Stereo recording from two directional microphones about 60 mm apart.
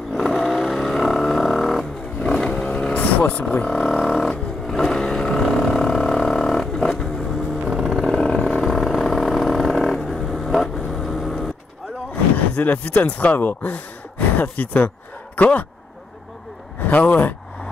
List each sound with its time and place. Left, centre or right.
0.1 s a sound: centre
2.3 s a sound: centre
2.9 s vehicle: left
3.6 s vehicle: centre
4.6 s a sound: centre
7.6 s vehicle: centre
8.2 s vehicle: centre
12.4 s speech: left
16.8 s speech: left